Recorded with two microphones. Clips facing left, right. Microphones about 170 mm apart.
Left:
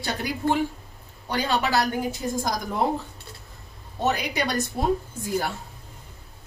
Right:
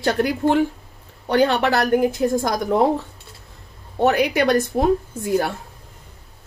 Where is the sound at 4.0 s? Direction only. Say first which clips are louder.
Right 8 dB; 60° right (ahead or behind).